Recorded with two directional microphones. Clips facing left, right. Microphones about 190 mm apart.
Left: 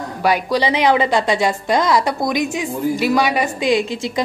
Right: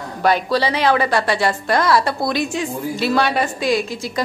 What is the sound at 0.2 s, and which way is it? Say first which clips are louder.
A woman's voice: even; 15° left (ahead or behind).